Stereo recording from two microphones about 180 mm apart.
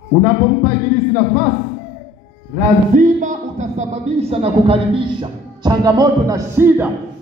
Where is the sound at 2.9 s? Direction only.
45° right (ahead or behind).